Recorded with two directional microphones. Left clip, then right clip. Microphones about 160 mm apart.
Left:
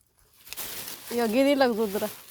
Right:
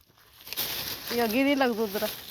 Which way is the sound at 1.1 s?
55° left (ahead or behind).